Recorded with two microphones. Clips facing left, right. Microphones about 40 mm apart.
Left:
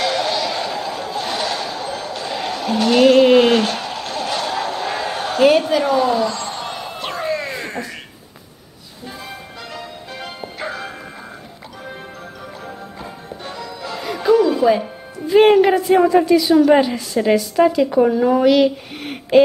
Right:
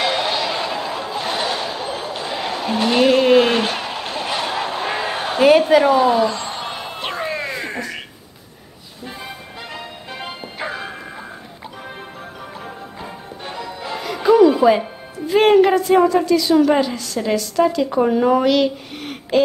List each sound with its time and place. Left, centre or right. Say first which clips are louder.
0.0 s a sound: even; centre
3.5 s a sound: left 2 dB; centre
9.8 s music: left 1 dB; centre
13.4 s music: right 1 dB; right
14.0 s music: right 3 dB; centre
15.1 s a woman's voice: left 1 dB; centre